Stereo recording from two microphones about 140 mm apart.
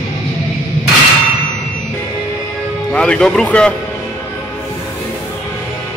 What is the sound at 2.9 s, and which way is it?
Speech, 5° left (ahead or behind).